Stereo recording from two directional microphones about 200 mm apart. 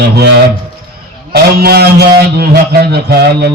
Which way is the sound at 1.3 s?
50° right (ahead or behind).